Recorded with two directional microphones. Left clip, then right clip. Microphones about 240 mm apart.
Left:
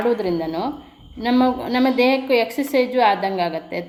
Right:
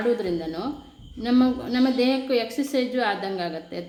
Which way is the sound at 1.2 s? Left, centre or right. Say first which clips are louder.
Left 4 dB; centre.